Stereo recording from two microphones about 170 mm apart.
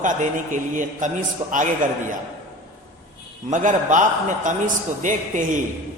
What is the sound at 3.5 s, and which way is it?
A man's voice, 50° right (ahead or behind).